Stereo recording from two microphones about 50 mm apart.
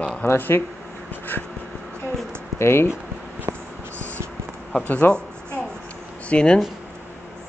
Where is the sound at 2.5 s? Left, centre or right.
Left.